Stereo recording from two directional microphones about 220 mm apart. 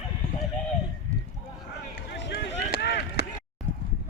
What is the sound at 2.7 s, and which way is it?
Chop, 50° left (ahead or behind).